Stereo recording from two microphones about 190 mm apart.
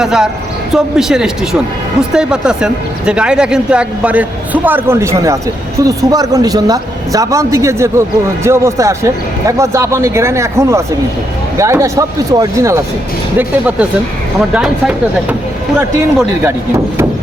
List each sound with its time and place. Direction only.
0.0 s a man's voice: 5° right (ahead or behind)
14.5 s speech: 5° right (ahead or behind)
16.4 s a man's voice: 10° right (ahead or behind)